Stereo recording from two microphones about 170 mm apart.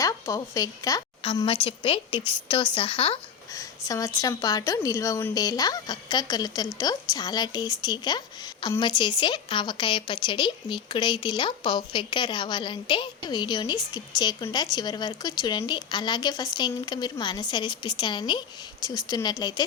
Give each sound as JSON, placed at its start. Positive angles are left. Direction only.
{"t": 0.0, "sound": "a woman's voice", "side_deg": 20}
{"t": 1.2, "sound": "a woman's voice", "side_deg": 35}
{"t": 3.5, "sound": "a woman's voice", "side_deg": 20}